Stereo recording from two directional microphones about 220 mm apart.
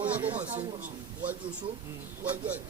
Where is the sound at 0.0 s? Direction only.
5° right (ahead or behind).